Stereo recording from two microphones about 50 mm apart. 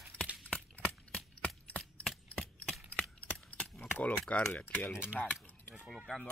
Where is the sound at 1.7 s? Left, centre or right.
Left.